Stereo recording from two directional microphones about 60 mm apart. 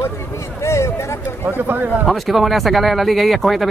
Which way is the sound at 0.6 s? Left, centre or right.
Left.